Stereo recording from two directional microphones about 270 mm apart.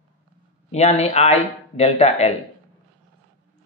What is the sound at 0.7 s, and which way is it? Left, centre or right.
Speech, left.